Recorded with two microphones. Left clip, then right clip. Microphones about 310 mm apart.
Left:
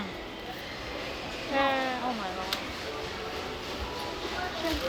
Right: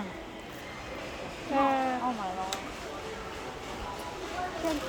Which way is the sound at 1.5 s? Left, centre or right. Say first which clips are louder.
Even; right.